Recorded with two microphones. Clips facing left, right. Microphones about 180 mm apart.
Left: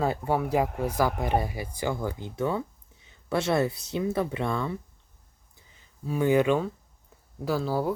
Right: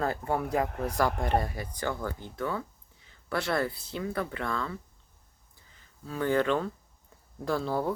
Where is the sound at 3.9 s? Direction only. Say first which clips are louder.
Left 7 dB; 20° left (ahead or behind).